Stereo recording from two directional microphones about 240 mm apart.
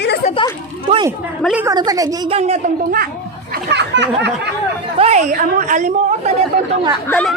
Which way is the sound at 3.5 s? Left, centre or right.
Right.